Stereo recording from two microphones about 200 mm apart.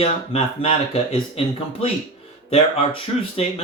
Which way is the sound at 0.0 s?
30° left (ahead or behind).